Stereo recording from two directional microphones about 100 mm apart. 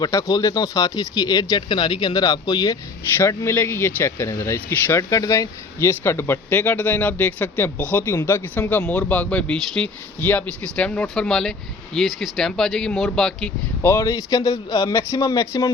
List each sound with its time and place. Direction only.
0.0 s speech: 35° left (ahead or behind)
1.7 s speech: 50° left (ahead or behind)
3.2 s speech: 25° left (ahead or behind); by 13.5 s 5° left (ahead or behind)
13.8 s speech: 30° left (ahead or behind)